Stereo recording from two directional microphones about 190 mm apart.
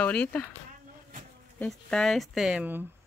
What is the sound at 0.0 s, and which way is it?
Speech, 5° left (ahead or behind).